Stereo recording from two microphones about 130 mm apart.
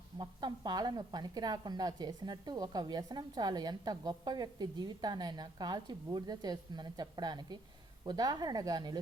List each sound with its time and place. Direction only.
0.2 s a woman's voice: 35° right (ahead or behind)